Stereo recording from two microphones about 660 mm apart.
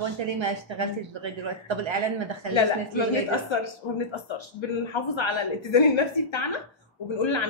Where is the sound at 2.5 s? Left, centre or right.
Left.